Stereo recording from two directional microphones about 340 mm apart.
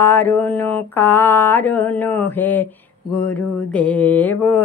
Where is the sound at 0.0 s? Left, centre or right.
Centre.